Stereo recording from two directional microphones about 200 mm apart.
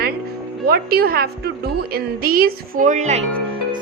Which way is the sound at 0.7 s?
50° right (ahead or behind).